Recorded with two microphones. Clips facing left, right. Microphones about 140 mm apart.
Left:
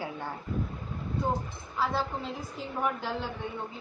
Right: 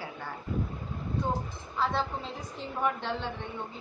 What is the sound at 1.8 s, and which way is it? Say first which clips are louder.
A woman's voice: even; 5° left (ahead or behind).